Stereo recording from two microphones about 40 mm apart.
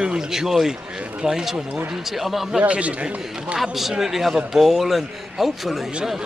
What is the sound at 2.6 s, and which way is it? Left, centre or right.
Speech, right.